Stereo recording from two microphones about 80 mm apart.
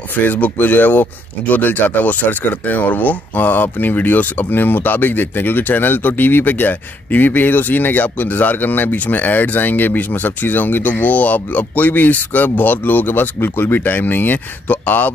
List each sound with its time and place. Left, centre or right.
0.1 s speech: left